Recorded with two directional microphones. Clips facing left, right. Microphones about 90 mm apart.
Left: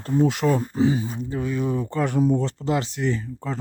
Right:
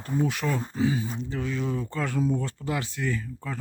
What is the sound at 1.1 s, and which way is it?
Speech, 10° left (ahead or behind).